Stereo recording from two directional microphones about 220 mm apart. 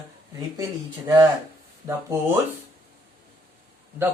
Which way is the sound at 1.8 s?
10° right (ahead or behind).